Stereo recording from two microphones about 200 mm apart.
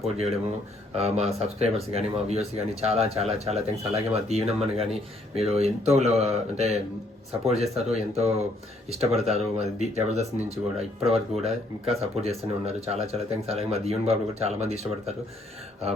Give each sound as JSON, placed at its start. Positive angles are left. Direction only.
{"t": 0.9, "sound": "speech", "side_deg": -30}